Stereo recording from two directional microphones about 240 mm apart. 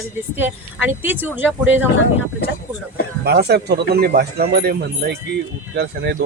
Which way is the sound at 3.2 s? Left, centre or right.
Right.